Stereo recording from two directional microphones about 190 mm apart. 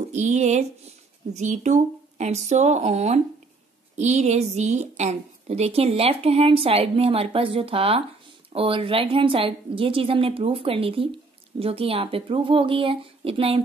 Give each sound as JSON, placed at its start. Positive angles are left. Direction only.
{"t": 0.1, "sound": "a woman's voice", "side_deg": -35}